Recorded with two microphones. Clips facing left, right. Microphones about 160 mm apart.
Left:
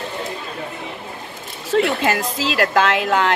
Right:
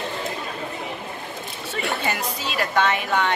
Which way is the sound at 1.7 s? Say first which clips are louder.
Left 9 dB; 90° left.